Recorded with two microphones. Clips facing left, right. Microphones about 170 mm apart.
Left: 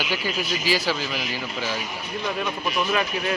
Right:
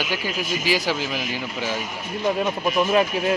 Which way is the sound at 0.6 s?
15° right (ahead or behind).